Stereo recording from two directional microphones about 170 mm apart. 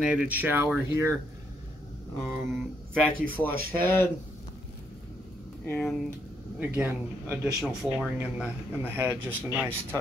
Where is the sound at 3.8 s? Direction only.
15° left (ahead or behind).